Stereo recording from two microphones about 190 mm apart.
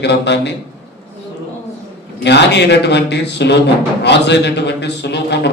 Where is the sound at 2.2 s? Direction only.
65° left (ahead or behind).